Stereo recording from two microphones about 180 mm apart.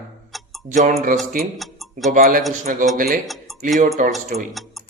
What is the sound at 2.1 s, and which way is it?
Speech, 45° right (ahead or behind).